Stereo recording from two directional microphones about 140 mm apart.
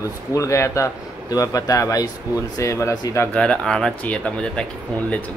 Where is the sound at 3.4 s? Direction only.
5° left (ahead or behind).